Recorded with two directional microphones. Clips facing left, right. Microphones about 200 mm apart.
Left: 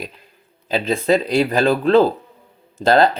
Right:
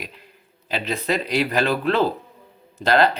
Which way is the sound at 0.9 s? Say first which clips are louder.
Left 7 dB; 30° left (ahead or behind).